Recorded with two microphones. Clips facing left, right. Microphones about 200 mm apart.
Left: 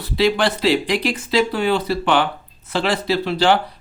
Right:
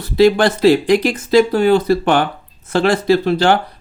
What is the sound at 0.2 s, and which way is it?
Speech, 45° right (ahead or behind).